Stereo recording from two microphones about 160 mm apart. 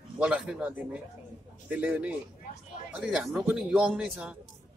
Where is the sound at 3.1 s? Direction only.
5° right (ahead or behind).